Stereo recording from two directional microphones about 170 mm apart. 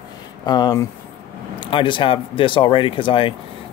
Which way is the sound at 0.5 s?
25° left (ahead or behind).